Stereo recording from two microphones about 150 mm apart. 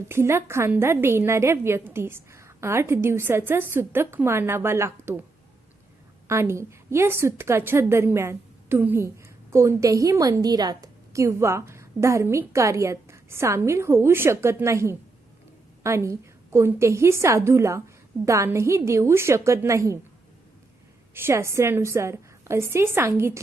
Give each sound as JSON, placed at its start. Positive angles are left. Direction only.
{"t": 0.1, "sound": "a woman's voice", "side_deg": -15}
{"t": 6.2, "sound": "a woman's voice", "side_deg": -15}
{"t": 21.1, "sound": "a woman's voice", "side_deg": -15}